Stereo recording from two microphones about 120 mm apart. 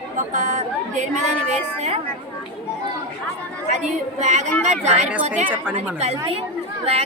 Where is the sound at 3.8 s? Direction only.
75° right (ahead or behind).